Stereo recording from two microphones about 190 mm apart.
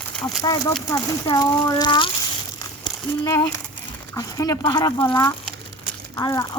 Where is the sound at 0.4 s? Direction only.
20° left (ahead or behind).